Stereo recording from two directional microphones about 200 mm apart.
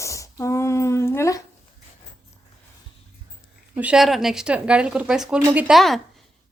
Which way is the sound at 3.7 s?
5° right (ahead or behind).